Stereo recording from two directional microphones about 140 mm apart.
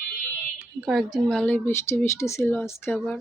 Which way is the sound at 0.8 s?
Centre (ahead or behind).